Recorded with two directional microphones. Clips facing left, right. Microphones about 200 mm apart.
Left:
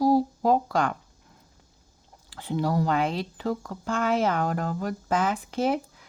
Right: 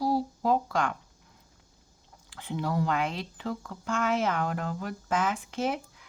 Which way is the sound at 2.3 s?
35° left (ahead or behind).